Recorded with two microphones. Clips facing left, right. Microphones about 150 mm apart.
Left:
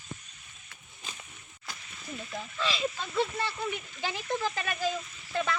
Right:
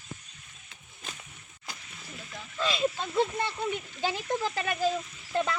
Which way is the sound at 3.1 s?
20° right (ahead or behind).